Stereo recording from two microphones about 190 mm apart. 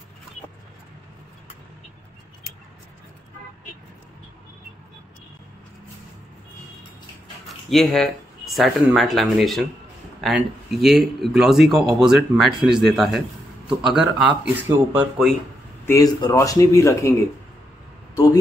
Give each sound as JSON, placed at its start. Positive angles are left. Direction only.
{"t": 7.4, "sound": "speech", "side_deg": 0}
{"t": 15.8, "sound": "speech", "side_deg": 15}